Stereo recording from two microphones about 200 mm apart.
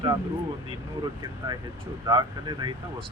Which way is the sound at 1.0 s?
25° right (ahead or behind).